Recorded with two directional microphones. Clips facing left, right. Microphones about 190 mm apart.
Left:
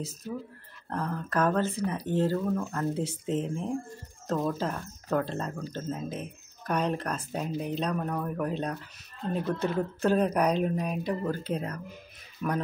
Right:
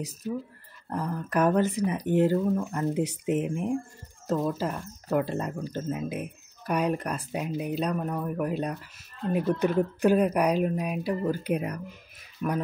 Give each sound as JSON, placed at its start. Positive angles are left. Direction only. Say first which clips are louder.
{"t": 0.2, "sound": "speech", "louder": "right 4 dB", "side_deg": -10}